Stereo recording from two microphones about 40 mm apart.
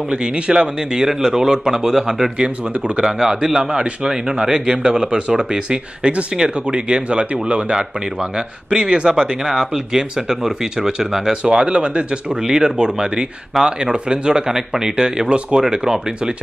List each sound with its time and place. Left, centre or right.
0.1 s a man's voice: centre
14.5 s a man's voice: centre
15.0 s a man's voice: right